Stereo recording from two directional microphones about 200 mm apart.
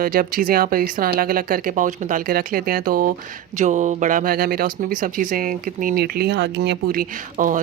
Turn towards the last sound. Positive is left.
turn(degrees=-40)  # may be behind; listen again after turning